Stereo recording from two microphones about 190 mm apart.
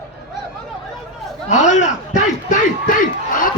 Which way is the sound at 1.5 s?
40° left (ahead or behind).